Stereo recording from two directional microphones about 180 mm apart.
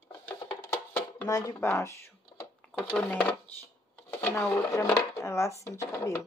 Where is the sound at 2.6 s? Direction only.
5° left (ahead or behind).